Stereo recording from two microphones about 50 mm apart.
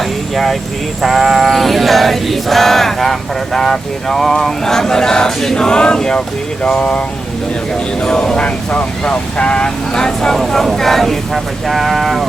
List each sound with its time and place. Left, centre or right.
1.0 s sheep: centre
8.0 s sheep: centre
10.4 s speech: centre